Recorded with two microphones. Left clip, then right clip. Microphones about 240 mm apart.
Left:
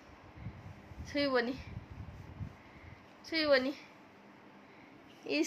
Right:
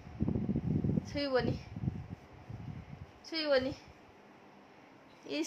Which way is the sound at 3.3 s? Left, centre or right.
Centre.